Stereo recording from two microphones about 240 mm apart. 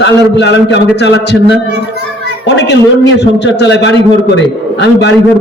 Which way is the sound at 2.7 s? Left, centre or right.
Left.